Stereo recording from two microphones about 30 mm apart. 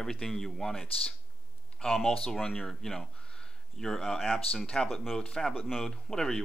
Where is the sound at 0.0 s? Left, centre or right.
Centre.